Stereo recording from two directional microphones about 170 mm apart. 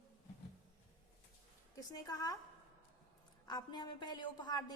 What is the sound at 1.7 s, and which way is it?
Speech, 20° left (ahead or behind).